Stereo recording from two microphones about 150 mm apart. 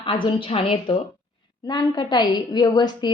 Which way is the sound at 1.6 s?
30° left (ahead or behind).